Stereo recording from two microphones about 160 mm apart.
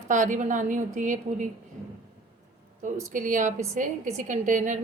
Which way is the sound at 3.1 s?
55° right (ahead or behind).